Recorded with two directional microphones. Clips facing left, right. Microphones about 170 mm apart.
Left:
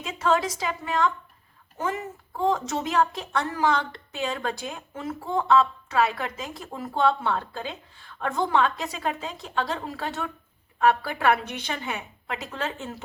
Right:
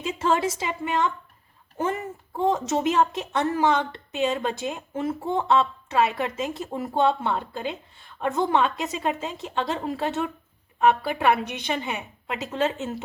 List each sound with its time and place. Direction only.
0.2 s a woman's voice: 25° right (ahead or behind)
2.4 s a woman's voice: 20° right (ahead or behind)